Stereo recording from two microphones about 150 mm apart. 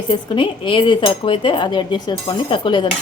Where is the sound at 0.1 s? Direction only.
35° left (ahead or behind).